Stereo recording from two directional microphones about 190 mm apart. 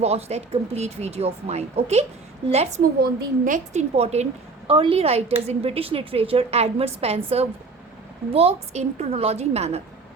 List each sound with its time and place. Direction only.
0.0 s speech: 35° right (ahead or behind)
3.0 s speech: 45° right (ahead or behind)